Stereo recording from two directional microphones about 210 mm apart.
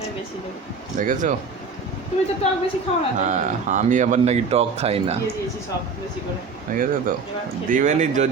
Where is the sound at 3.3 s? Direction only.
35° right (ahead or behind).